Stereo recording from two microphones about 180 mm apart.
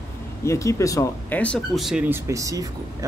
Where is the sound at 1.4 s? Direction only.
5° left (ahead or behind); by 3.0 s 20° right (ahead or behind).